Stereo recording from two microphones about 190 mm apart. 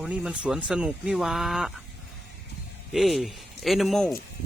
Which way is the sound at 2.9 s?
Centre (ahead or behind).